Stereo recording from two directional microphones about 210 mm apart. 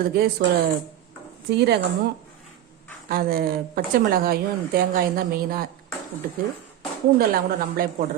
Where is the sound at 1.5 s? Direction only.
55° right (ahead or behind).